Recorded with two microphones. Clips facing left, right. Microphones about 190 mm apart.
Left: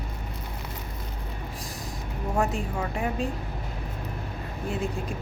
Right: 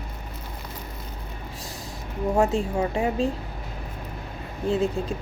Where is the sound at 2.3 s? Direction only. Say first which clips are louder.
Right 5 dB; 25° right (ahead or behind).